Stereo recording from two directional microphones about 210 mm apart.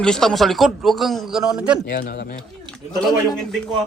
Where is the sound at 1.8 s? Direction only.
40° left (ahead or behind).